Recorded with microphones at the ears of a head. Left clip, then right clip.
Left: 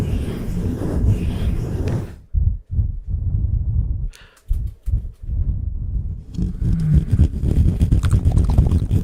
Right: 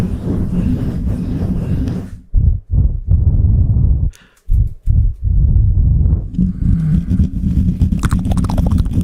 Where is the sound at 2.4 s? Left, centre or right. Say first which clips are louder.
Right 9 dB; right.